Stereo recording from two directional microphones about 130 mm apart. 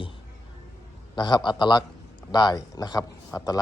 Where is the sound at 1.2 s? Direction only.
35° left (ahead or behind).